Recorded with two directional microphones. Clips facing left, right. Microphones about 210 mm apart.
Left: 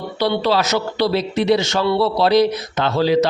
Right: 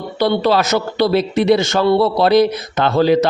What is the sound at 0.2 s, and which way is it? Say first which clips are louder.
A man's voice: right 3 dB; 50° right (ahead or behind).